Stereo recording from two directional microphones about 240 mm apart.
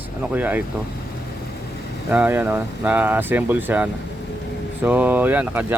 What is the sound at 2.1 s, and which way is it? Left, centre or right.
Speech, centre.